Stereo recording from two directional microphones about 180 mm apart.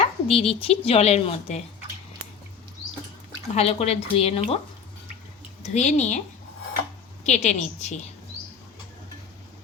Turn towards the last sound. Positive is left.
turn(degrees=40)  # may be behind; listen again after turning